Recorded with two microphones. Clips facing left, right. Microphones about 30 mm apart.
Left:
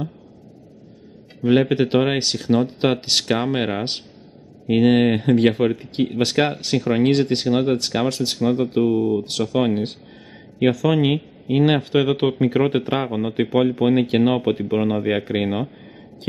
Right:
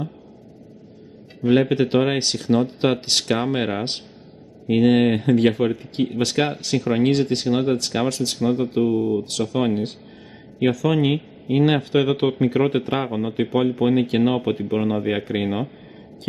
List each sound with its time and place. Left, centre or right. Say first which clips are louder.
1.4 s speech: left 1 dB; centre
7.1 s speech: left 1 dB; left
8.4 s speech: left 1 dB; centre